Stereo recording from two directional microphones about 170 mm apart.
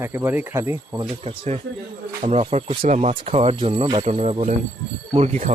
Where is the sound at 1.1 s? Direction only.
35° right (ahead or behind).